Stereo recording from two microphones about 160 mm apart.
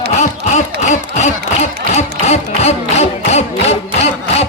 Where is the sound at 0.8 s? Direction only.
45° left (ahead or behind).